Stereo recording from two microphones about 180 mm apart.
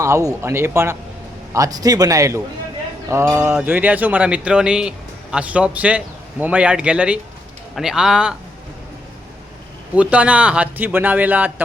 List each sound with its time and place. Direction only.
0.0 s speech: 15° right (ahead or behind)
9.9 s speech: 5° right (ahead or behind)